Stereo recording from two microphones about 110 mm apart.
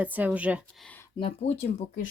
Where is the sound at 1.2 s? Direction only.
60° left (ahead or behind).